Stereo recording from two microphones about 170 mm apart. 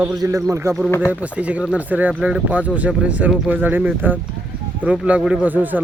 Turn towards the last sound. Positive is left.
turn(degrees=-10)  # may be behind; listen again after turning